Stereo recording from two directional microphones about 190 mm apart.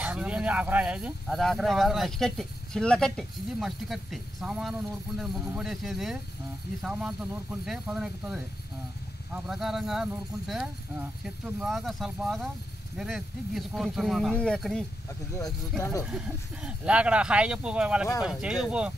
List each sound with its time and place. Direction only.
0.0 s speech: 5° right (ahead or behind)
15.8 s speech: 15° left (ahead or behind)
16.1 s speech: 5° right (ahead or behind)